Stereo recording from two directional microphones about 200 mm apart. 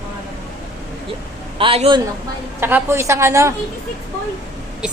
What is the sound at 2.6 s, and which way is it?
Speech, 10° right (ahead or behind).